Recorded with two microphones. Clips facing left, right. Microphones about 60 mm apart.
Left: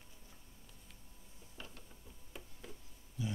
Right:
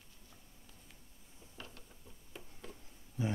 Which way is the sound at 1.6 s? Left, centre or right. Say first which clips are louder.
Right 1 dB; centre.